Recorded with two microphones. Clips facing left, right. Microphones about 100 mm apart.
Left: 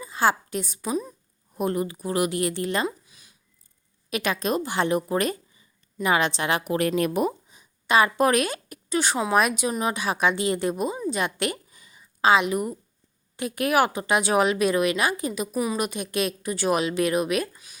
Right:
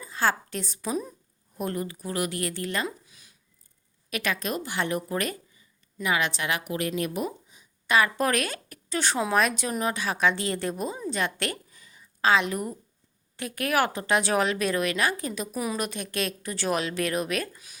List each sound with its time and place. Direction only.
0.0 s a woman's voice: 15° left (ahead or behind)
3.1 s a sound: 5° left (ahead or behind)
4.1 s speech: 20° left (ahead or behind)
6.7 s speech: 55° left (ahead or behind)
7.9 s speech: 20° left (ahead or behind)